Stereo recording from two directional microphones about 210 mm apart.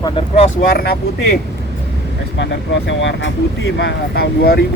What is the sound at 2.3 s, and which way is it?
Speech, 55° left (ahead or behind).